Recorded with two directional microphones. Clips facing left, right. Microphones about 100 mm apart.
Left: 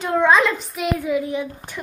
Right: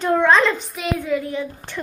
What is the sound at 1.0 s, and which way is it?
Speech, 15° left (ahead or behind).